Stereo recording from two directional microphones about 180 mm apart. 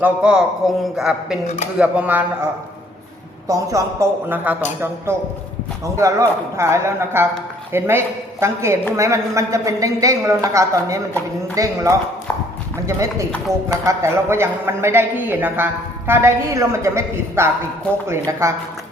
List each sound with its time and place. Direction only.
0.0 s a man's voice: 5° right (ahead or behind)
3.5 s a man's voice: 20° right (ahead or behind)